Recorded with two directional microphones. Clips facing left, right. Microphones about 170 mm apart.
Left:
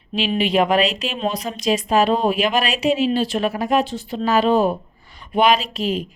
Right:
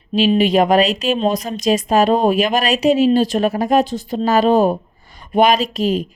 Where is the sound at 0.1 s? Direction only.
40° right (ahead or behind).